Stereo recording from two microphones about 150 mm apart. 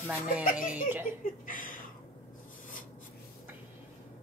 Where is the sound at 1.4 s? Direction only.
65° left (ahead or behind).